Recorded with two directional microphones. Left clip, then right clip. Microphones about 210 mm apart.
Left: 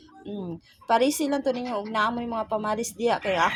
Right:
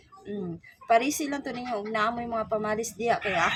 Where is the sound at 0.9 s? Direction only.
20° left (ahead or behind).